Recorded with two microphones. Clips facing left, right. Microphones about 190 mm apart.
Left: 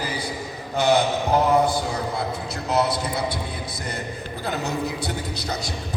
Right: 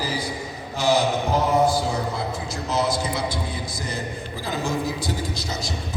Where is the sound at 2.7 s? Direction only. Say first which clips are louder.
Left 1 dB; 60° left (ahead or behind).